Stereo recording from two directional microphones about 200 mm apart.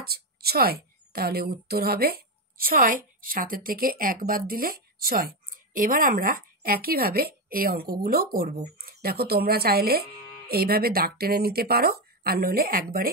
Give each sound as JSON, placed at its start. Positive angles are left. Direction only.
{"t": 0.0, "sound": "a woman's voice", "side_deg": -50}